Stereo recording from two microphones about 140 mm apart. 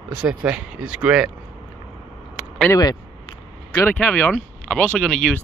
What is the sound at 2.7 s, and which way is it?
Speech, 25° left (ahead or behind).